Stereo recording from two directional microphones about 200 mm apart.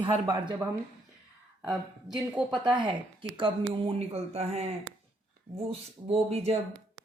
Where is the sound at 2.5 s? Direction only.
25° right (ahead or behind).